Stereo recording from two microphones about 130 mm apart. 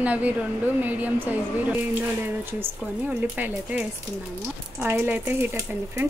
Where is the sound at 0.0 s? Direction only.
10° right (ahead or behind).